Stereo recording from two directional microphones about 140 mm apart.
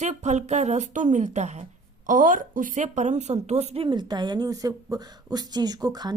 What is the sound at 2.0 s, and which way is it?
Speech, 70° right (ahead or behind).